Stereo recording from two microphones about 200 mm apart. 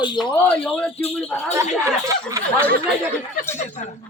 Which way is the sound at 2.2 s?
15° right (ahead or behind).